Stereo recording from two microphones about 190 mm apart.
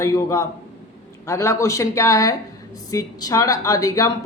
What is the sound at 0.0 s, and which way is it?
Speech, 15° left (ahead or behind).